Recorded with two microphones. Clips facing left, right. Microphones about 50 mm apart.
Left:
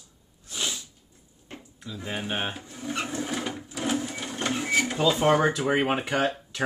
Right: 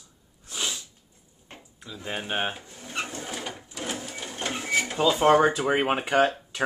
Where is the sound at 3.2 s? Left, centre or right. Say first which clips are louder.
Left 4 dB; centre.